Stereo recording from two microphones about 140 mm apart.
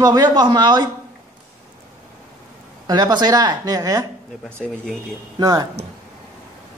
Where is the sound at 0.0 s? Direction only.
30° right (ahead or behind).